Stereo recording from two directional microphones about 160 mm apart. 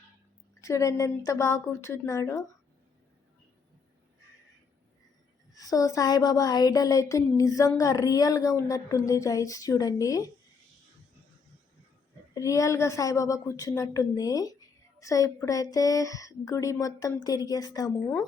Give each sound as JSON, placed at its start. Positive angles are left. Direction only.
{"t": 0.6, "sound": "a woman's voice", "side_deg": 20}
{"t": 5.5, "sound": "a woman's voice", "side_deg": 20}
{"t": 12.3, "sound": "a woman's voice", "side_deg": 20}